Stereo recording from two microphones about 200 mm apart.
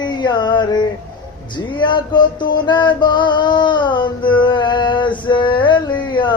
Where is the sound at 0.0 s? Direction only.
20° left (ahead or behind).